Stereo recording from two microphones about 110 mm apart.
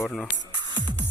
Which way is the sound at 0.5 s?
40° right (ahead or behind).